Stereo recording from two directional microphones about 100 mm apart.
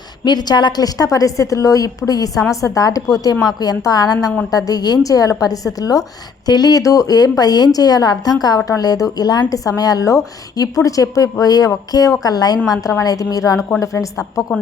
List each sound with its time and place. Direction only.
0.3 s a woman's voice: 45° left (ahead or behind)